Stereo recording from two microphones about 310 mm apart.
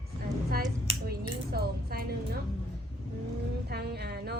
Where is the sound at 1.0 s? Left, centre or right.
Right.